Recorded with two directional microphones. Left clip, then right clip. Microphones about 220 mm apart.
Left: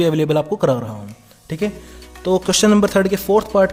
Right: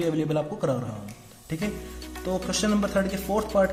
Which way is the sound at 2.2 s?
50° left (ahead or behind).